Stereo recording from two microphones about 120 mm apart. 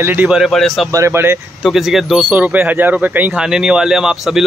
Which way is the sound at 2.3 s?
15° right (ahead or behind).